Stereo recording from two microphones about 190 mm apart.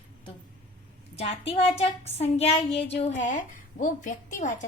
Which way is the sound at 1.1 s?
30° left (ahead or behind).